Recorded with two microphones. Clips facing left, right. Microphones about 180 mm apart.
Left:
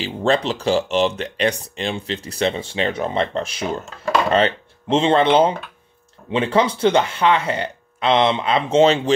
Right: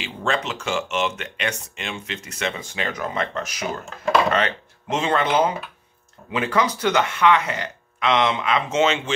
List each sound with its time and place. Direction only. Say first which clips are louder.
0.0 s speech: left 6 dB; 35° left (ahead or behind)